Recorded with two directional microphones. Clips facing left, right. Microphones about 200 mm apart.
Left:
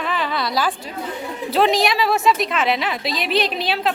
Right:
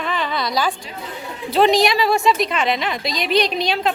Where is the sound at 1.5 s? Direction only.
Centre (ahead or behind).